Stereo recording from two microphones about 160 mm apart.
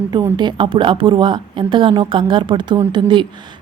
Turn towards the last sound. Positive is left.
turn(degrees=-30)  # may be behind; listen again after turning